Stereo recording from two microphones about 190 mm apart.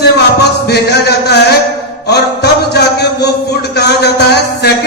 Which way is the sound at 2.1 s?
60° left (ahead or behind).